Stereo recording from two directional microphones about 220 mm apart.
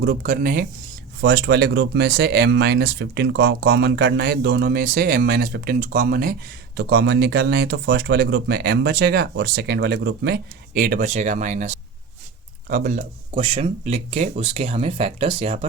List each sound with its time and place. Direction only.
0.0 s speech: 40° right (ahead or behind)
13.3 s speech: 25° right (ahead or behind)